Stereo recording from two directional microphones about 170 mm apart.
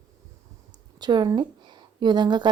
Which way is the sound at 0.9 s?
25° right (ahead or behind).